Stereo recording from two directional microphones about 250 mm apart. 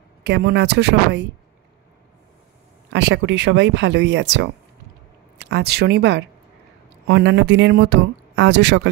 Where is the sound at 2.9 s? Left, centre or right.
Right.